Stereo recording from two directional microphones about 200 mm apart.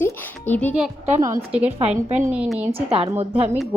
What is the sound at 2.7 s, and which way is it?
Speech, 30° right (ahead or behind).